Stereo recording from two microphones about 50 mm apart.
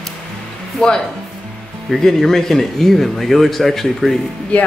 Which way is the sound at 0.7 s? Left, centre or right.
Centre.